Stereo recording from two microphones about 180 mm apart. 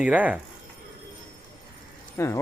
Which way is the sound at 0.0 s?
5° right (ahead or behind).